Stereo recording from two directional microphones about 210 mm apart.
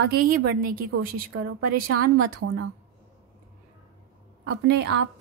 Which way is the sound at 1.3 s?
85° right.